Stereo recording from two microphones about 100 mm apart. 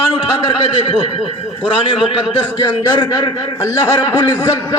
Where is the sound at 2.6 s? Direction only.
50° left (ahead or behind); by 4.5 s 35° left (ahead or behind).